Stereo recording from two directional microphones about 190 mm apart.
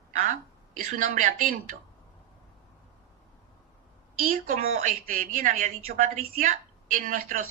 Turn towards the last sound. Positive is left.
turn(degrees=-45)  # may be behind; listen again after turning